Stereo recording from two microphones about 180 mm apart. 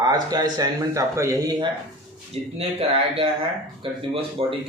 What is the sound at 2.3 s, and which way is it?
Speech, 35° right (ahead or behind).